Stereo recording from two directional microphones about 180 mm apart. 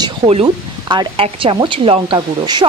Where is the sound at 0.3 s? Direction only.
30° right (ahead or behind).